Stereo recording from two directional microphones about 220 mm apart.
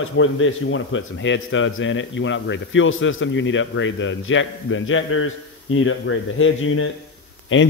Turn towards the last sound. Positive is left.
turn(degrees=60)  # may be behind; listen again after turning